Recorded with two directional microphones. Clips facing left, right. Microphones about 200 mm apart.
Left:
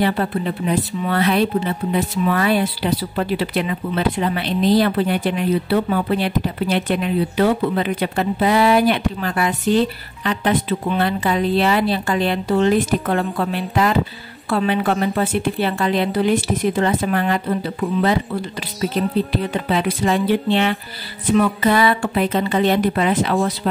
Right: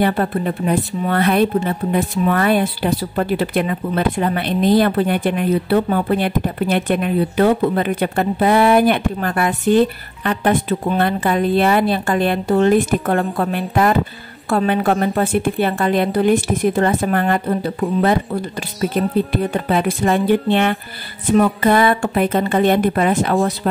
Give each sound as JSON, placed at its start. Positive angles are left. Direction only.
{"t": 0.0, "sound": "speech", "side_deg": -45}